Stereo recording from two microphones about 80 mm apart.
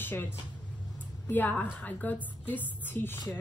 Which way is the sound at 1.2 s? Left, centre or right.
Left.